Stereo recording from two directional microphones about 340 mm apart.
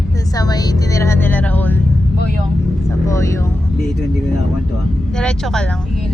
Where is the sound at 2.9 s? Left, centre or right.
Centre.